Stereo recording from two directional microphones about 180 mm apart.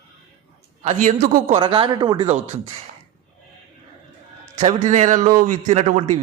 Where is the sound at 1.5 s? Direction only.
30° right (ahead or behind).